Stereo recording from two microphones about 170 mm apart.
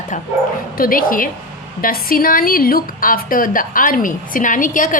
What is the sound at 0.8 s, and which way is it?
A woman's voice, 55° left (ahead or behind).